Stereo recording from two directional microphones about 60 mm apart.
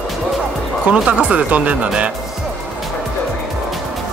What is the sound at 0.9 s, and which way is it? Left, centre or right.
Speech, right.